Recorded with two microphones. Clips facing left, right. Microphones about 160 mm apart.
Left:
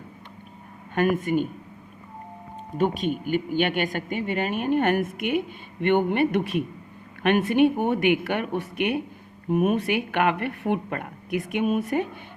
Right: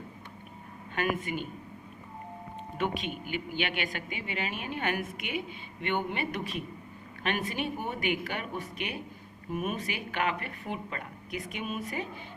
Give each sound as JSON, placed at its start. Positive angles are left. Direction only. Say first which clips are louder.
{"t": 0.9, "sound": "speech", "louder": "left 9 dB", "side_deg": 50}
{"t": 2.7, "sound": "speech", "louder": "left 9 dB", "side_deg": 45}